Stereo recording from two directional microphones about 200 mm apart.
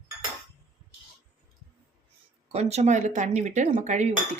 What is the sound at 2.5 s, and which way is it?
Dishes, 30° right (ahead or behind).